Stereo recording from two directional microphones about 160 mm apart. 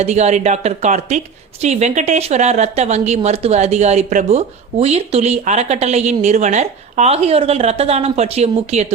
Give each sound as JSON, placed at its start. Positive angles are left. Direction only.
{"t": 0.0, "sound": "speech", "side_deg": -45}